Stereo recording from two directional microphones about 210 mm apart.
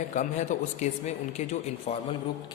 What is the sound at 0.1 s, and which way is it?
Speech, 35° left (ahead or behind).